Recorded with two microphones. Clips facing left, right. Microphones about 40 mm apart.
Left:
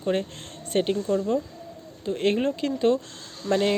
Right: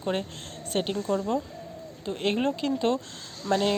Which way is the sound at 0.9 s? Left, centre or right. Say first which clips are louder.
Left 3 dB; centre.